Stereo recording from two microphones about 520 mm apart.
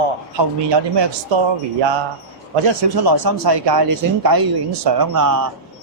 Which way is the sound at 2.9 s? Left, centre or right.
Right.